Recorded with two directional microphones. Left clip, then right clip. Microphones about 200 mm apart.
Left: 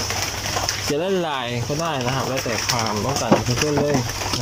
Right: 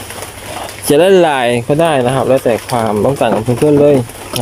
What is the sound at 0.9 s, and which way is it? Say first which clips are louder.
Speech: right 17 dB; 50° right (ahead or behind).